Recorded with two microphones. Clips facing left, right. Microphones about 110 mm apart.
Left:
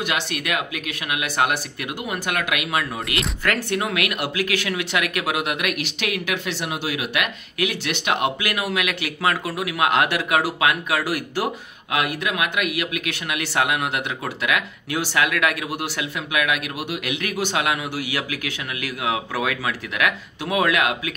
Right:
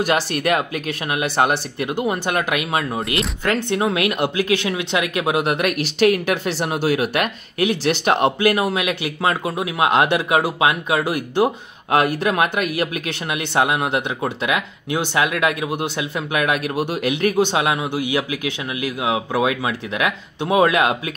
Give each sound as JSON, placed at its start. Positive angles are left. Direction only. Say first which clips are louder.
{"t": 0.0, "sound": "speech", "louder": "right 7 dB", "side_deg": -40}
{"t": 11.9, "sound": "speech", "louder": "right 6 dB", "side_deg": -35}
{"t": 16.3, "sound": "speech", "louder": "right 3 dB", "side_deg": -35}